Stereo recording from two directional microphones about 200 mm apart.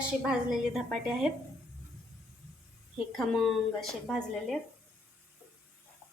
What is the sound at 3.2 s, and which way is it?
A woman's voice, centre (ahead or behind).